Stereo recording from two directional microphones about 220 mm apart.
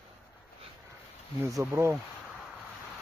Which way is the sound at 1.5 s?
10° right (ahead or behind).